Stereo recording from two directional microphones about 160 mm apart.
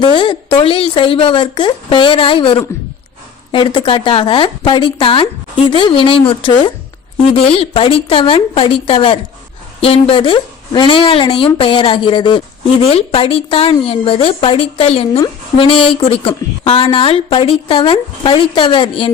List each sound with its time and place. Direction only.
0.2 s a woman's voice: 30° left (ahead or behind)